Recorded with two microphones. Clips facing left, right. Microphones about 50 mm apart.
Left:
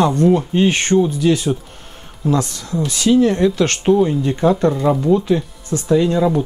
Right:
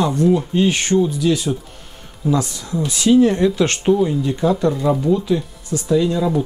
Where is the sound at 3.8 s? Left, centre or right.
Centre.